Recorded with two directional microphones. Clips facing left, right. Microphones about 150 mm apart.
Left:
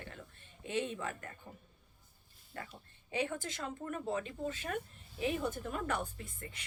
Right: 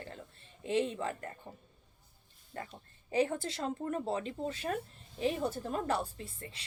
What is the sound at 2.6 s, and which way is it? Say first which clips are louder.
A woman's voice: right 3 dB; 35° right (ahead or behind).